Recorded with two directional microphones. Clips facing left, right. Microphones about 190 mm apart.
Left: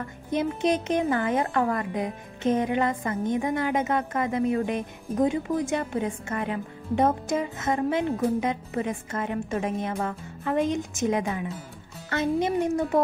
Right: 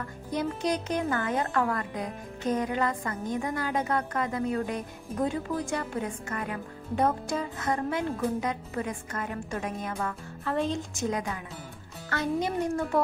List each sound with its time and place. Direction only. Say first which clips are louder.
0.3 s a woman's voice: left 4 dB; 20° left (ahead or behind)